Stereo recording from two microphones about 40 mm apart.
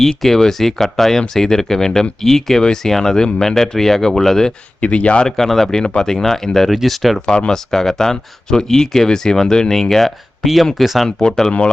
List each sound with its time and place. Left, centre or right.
0.0 s speech: centre
4.8 s speech: left
5.2 s speech: centre
5.8 s speech: centre
7.3 s speech: centre
10.4 s speech: centre
11.2 s speech: centre